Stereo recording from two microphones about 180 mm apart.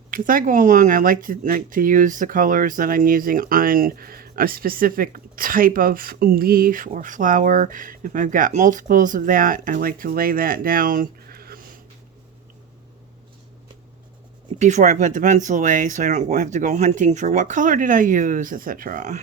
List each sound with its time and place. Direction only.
0.1 s speech: 50° right (ahead or behind)
14.6 s speech: 40° right (ahead or behind)